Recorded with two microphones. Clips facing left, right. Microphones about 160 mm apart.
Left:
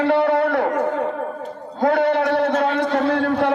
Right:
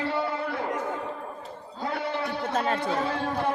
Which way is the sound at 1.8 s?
70° left (ahead or behind).